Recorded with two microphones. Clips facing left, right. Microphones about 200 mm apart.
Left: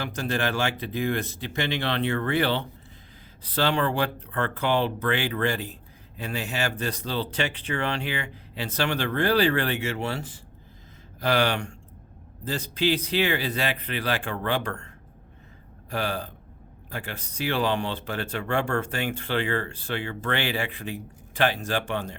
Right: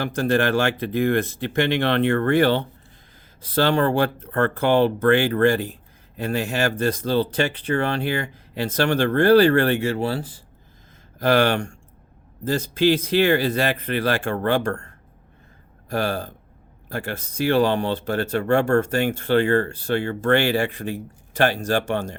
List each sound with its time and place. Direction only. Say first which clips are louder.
0.0 s speech: right 7 dB; 55° right (ahead or behind)
9.9 s speech: right 6 dB; 35° right (ahead or behind)
11.2 s speech: right 5 dB; 50° right (ahead or behind)